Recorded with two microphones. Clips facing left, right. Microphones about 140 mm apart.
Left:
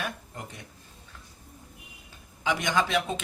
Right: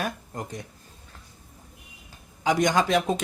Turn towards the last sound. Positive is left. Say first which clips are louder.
# right 4 dB
turn(degrees=-40)  # may be behind; listen again after turning